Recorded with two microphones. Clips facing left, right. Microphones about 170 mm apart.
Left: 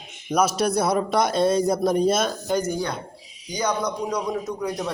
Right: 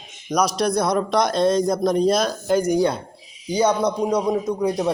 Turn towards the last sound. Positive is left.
turn(degrees=-25)  # may be behind; listen again after turning